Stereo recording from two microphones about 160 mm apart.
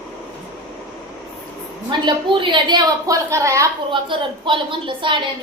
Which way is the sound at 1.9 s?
30° right (ahead or behind).